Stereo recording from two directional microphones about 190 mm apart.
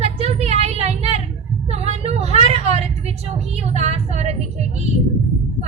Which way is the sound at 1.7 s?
35° right (ahead or behind).